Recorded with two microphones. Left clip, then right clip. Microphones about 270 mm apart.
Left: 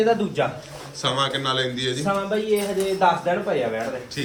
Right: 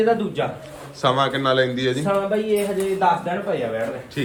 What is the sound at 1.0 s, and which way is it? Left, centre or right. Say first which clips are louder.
A man's voice: right 4 dB; centre.